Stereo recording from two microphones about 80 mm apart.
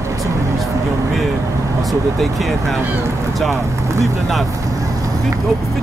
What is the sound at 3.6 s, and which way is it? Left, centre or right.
Speech, right.